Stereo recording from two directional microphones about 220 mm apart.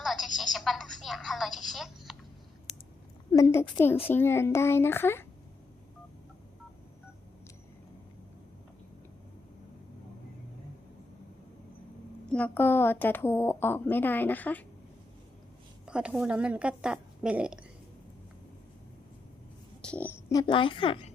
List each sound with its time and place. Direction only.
0.0 s telephone: centre (ahead or behind)
3.3 s a woman's voice: 10° left (ahead or behind)
12.2 s a woman's voice: 5° left (ahead or behind)
15.9 s a woman's voice: 5° right (ahead or behind)
19.8 s a sound: 5° left (ahead or behind)
20.5 s a woman's voice: 20° left (ahead or behind)